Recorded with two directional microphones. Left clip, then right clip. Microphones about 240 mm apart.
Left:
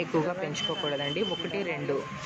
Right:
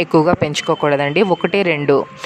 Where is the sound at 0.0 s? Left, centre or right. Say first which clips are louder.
Right 15 dB; right.